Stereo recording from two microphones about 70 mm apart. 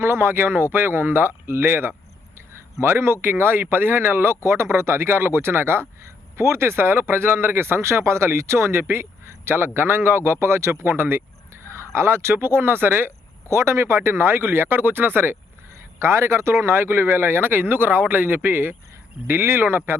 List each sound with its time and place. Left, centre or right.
0.0 s speech: right
16.0 s speech: right